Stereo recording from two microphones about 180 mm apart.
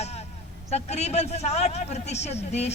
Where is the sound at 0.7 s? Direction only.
35° left (ahead or behind).